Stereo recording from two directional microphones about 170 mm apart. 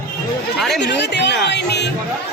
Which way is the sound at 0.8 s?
90° left.